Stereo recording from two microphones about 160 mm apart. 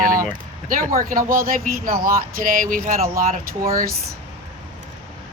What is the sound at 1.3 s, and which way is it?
Speech, 60° right (ahead or behind).